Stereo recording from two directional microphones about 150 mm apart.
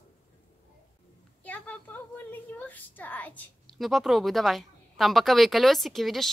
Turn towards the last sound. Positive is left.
turn(degrees=0)  # may be behind; listen again after turning